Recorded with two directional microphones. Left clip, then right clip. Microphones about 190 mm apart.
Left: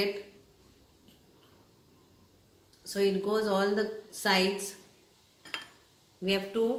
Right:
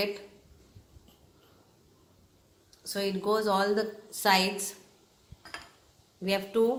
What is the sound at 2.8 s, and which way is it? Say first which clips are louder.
A woman's voice: left 3 dB; 45° right (ahead or behind).